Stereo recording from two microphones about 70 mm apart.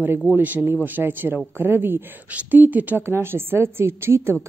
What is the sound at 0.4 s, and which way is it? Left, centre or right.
A woman's voice, right.